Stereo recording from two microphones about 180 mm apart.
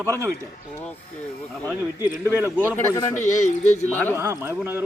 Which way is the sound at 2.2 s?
15° right (ahead or behind).